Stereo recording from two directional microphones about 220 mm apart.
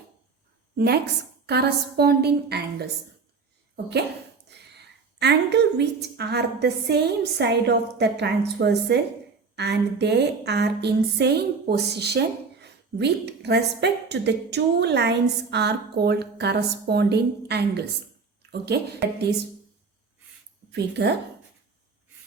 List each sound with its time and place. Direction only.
1.5 s a woman's voice: 45° right (ahead or behind)
4.5 s a sound: 50° right (ahead or behind)
5.2 s a woman's voice: 50° right (ahead or behind)
20.7 s a woman's voice: 50° right (ahead or behind)